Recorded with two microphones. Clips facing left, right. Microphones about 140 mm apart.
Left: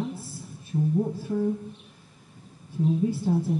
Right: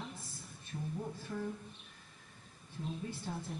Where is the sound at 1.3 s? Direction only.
15° left (ahead or behind).